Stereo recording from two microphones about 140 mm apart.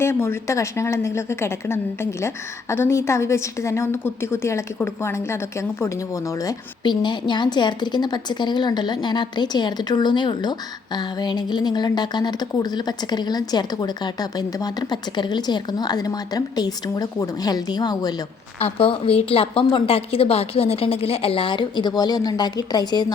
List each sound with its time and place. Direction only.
0.0 s a woman's voice: 15° left (ahead or behind)
18.6 s a woman's voice: 40° left (ahead or behind)